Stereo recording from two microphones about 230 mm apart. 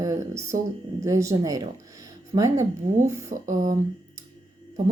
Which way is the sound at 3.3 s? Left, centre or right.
Right.